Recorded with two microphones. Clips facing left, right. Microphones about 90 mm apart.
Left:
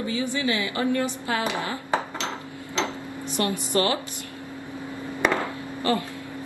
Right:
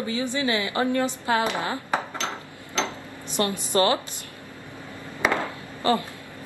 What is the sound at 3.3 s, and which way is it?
Speech, 20° right (ahead or behind).